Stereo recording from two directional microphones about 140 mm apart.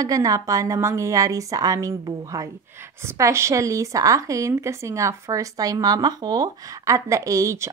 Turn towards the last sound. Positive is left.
turn(degrees=-20)  # may be behind; listen again after turning